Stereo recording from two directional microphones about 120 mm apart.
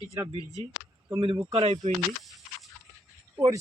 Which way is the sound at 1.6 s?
65° right (ahead or behind).